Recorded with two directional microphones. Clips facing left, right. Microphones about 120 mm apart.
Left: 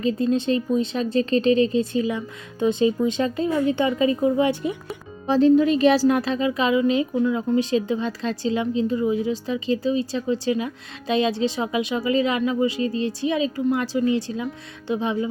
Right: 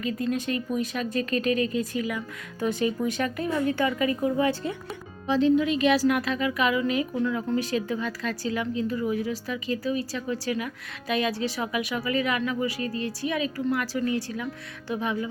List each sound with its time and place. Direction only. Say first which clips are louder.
0.0 s a woman's voice: left 6 dB; 25° left (ahead or behind)
5.3 s a woman's voice: left 5 dB; 40° left (ahead or behind); by 15.3 s 25° left (ahead or behind)